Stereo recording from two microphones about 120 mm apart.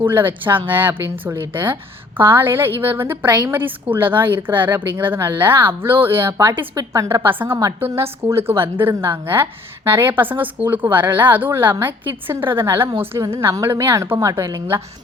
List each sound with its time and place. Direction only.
0.0 s a woman's voice: 15° right (ahead or behind)
3.2 s a woman's voice: 35° right (ahead or behind)
3.5 s a woman's voice: 15° right (ahead or behind)
6.7 s a woman's voice: 30° right (ahead or behind)